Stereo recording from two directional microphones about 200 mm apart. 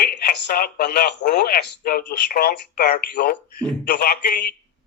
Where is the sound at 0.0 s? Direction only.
50° left (ahead or behind).